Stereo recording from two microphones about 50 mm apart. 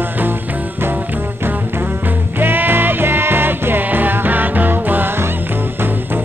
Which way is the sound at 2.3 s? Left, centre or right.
Right.